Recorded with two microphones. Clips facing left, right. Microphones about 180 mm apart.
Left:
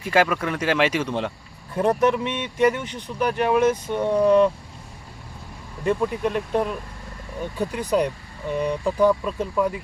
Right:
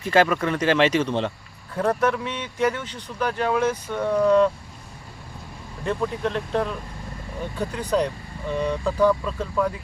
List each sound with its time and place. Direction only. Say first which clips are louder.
0.0 s speech: right 1 dB; 10° left (ahead or behind)
1.7 s speech: left 2 dB; 20° left (ahead or behind)
5.8 s speech: left 3 dB; 15° left (ahead or behind)